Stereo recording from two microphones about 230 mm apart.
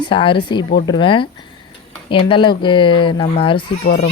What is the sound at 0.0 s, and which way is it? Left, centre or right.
Speech, left.